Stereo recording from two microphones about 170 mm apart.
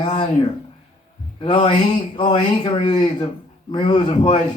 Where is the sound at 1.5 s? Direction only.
30° left (ahead or behind).